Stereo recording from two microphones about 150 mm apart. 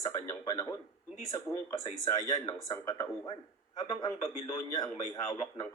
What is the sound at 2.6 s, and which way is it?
Speech, 25° left (ahead or behind).